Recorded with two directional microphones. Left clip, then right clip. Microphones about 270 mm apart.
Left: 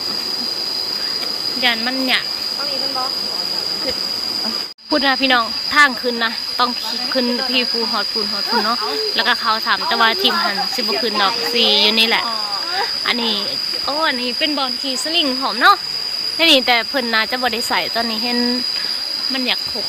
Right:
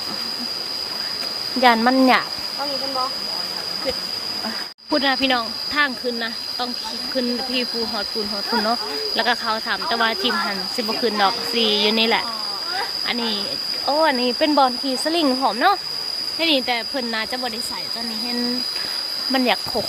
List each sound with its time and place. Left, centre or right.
1.6 s speech: centre
4.9 s speech: centre
9.1 s speech: centre
14.0 s speech: centre